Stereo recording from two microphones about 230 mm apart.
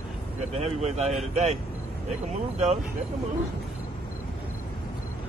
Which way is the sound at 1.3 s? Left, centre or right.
Right.